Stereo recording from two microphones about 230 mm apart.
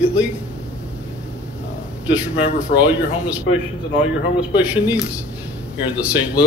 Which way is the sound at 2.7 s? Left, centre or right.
Centre.